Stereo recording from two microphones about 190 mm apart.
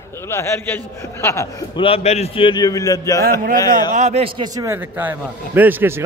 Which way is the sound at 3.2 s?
50° right (ahead or behind).